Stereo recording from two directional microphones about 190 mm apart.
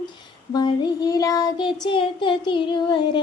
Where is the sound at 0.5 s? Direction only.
20° left (ahead or behind).